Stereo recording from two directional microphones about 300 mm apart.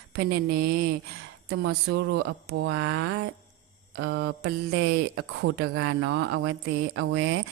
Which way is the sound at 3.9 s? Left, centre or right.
Right.